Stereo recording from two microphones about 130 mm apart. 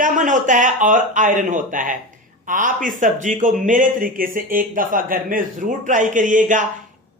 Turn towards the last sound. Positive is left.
turn(degrees=-80)